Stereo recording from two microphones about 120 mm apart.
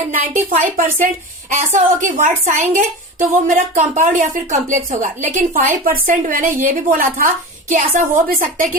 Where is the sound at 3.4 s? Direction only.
90° right.